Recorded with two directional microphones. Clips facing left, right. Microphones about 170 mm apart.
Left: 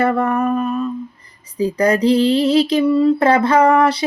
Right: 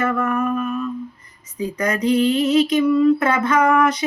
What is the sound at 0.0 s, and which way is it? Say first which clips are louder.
Speech: left 4 dB; 35° left (ahead or behind).